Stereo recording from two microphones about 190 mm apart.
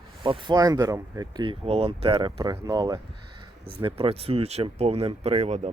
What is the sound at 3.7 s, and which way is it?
Speech, 30° right (ahead or behind).